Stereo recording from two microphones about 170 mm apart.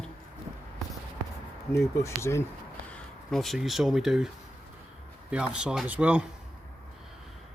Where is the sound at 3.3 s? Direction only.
Centre (ahead or behind).